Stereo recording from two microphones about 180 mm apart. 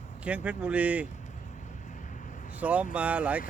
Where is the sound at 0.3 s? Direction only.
10° right (ahead or behind).